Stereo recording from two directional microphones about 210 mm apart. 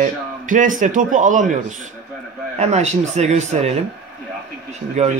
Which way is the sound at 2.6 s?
30° right (ahead or behind).